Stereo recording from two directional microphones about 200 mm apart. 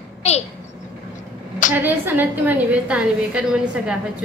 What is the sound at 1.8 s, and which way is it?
A woman's voice, 10° right (ahead or behind).